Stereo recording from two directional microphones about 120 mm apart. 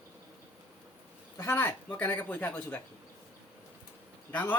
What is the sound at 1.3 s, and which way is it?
A man's voice, 20° left (ahead or behind).